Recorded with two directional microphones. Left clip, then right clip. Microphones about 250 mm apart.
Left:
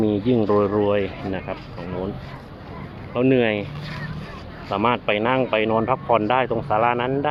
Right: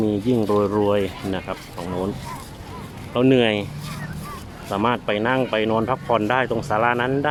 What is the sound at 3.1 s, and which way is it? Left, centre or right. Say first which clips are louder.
Speech: right 1 dB; centre.